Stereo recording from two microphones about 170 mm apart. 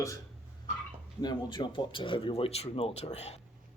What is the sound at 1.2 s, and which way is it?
Speech, 25° left (ahead or behind).